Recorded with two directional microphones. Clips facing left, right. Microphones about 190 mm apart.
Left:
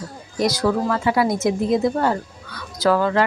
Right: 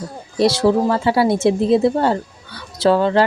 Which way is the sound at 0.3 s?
25° right (ahead or behind).